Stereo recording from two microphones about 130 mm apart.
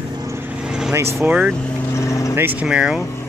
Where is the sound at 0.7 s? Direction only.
5° right (ahead or behind).